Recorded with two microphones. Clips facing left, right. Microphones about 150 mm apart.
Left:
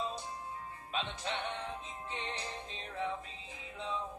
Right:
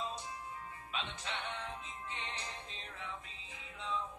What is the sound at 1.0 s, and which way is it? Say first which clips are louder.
Music: left 4 dB; 35° left (ahead or behind).